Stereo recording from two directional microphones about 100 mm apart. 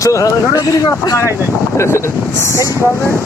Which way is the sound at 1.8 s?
30° left (ahead or behind).